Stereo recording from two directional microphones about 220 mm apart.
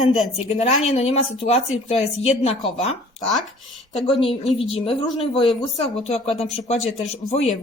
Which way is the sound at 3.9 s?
25° left (ahead or behind).